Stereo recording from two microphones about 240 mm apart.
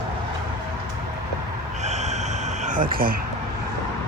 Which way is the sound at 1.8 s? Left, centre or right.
Right.